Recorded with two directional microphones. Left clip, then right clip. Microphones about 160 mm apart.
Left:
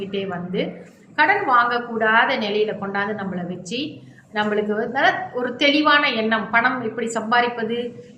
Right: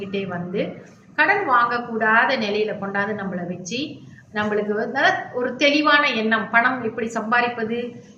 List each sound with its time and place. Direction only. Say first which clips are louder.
0.1 s a woman's voice: left 1 dB; 15° left (ahead or behind)